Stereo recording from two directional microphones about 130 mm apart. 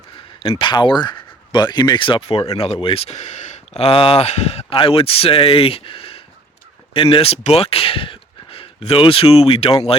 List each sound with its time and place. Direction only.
0.6 s speech: 35° left (ahead or behind)